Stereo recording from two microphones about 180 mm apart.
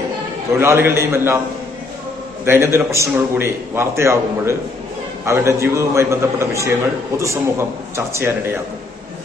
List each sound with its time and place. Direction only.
0.6 s a man's voice: 15° right (ahead or behind)
2.4 s a man's voice: 15° right (ahead or behind)